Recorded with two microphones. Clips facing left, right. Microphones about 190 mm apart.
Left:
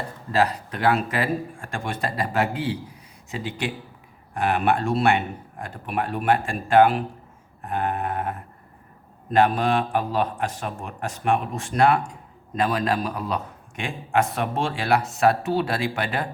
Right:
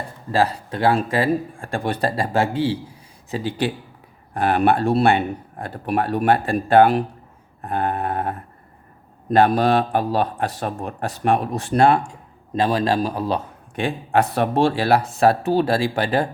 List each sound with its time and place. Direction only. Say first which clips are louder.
0.3 s a man's voice: right 2 dB; 30° right (ahead or behind)